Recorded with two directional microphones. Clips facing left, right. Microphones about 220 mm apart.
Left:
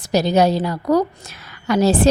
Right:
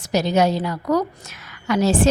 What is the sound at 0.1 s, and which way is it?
A woman's voice, 35° left (ahead or behind).